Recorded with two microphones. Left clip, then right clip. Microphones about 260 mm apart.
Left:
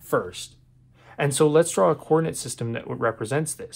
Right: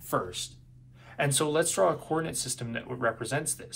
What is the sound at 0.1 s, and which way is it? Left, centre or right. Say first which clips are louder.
Speech: left 6 dB; left.